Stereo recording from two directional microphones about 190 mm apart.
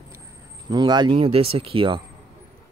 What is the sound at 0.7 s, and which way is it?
Speech, 20° right (ahead or behind).